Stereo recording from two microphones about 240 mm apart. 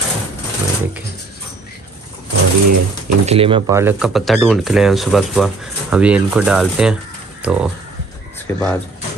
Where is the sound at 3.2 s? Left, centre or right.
Right.